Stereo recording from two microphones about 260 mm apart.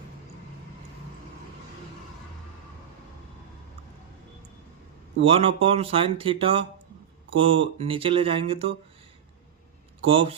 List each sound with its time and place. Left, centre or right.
5.2 s speech: right
10.1 s speech: right